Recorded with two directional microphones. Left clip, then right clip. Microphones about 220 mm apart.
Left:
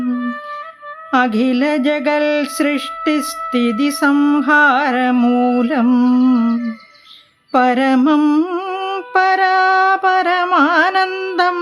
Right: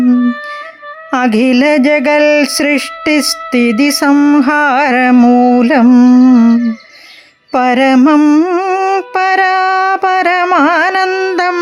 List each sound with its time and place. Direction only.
0.0 s music: 40° right (ahead or behind); by 5.4 s 25° right (ahead or behind)
5.5 s a sound: 30° right (ahead or behind)
6.5 s humming: 45° right (ahead or behind)
7.5 s music: 30° right (ahead or behind)